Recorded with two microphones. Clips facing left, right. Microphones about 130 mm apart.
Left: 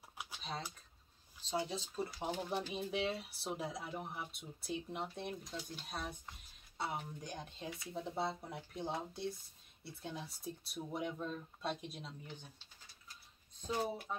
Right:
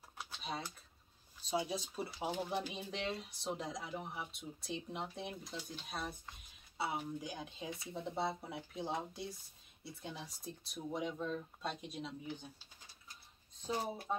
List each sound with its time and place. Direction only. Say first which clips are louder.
0.4 s a sound: right 2 dB; 10° right (ahead or behind)
1.5 s speech: right 1 dB; 10° right (ahead or behind)
2.5 s speech: left 2 dB; 5° left (ahead or behind)